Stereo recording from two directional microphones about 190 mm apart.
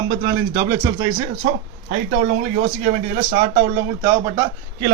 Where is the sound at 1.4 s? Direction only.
45° right (ahead or behind).